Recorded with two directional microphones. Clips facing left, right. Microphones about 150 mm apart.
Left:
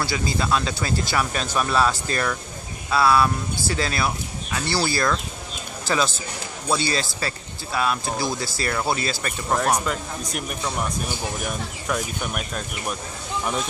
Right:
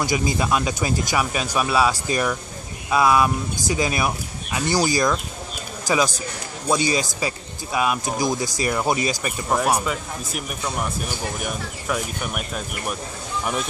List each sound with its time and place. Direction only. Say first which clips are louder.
0.0 s a man's voice: right 3 dB; 15° right (ahead or behind)